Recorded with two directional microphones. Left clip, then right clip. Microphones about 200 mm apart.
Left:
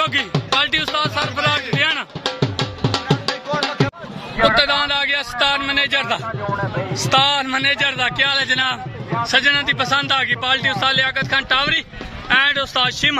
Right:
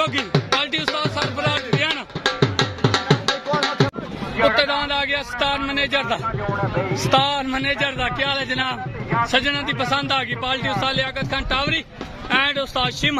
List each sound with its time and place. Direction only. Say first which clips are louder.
0.0 s music: left 2 dB; centre (ahead or behind)
3.3 s music: right 1 dB; 35° right (ahead or behind)
4.4 s a man's voice: left 3 dB; centre (ahead or behind)